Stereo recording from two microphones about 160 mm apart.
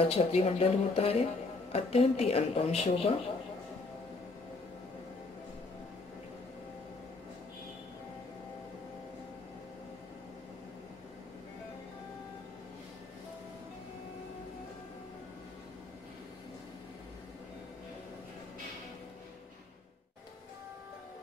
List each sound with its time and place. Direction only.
0.0 s speech: 35° left (ahead or behind)